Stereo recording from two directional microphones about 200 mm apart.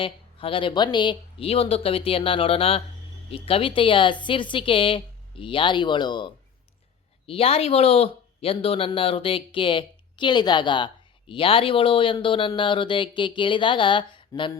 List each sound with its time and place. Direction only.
0.0 s speech: 25° left (ahead or behind)